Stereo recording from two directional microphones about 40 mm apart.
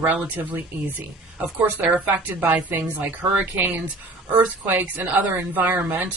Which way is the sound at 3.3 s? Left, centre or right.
Right.